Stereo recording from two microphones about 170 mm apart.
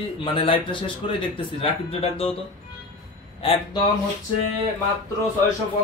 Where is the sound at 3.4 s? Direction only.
30° left (ahead or behind).